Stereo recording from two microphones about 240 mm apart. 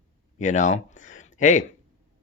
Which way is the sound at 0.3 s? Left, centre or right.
Left.